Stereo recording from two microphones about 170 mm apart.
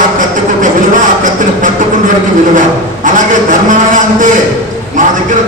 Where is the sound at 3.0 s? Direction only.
50° right (ahead or behind).